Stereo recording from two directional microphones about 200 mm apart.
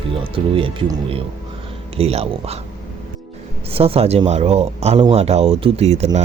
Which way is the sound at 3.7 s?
30° right (ahead or behind).